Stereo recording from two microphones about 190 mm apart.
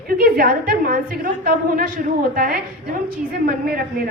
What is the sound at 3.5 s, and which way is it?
Speech, 50° right (ahead or behind).